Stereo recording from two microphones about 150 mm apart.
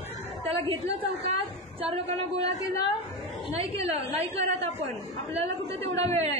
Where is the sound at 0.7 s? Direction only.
40° right (ahead or behind).